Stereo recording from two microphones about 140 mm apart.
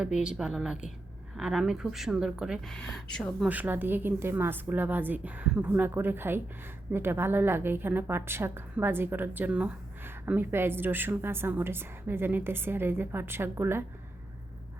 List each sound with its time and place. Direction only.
0.0 s speech: 5° right (ahead or behind)
2.7 s speech: 5° left (ahead or behind)
3.4 s a woman's voice: 10° right (ahead or behind)